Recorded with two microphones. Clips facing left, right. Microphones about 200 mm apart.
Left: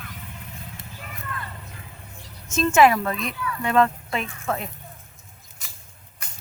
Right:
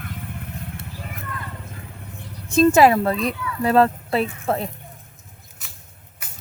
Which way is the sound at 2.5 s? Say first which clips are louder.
Right 4 dB; 35° right (ahead or behind).